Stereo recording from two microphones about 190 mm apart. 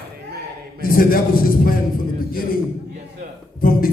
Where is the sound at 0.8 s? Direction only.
50° left (ahead or behind).